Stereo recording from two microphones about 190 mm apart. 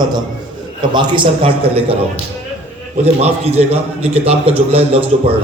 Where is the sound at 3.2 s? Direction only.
35° right (ahead or behind).